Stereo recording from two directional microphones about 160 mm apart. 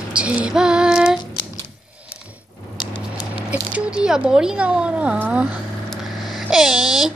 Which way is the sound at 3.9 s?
5° right (ahead or behind).